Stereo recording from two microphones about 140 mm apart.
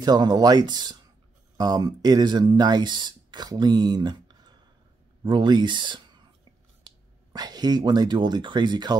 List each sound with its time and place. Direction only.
0.0 s speech: 30° right (ahead or behind)
7.3 s speech: 30° right (ahead or behind)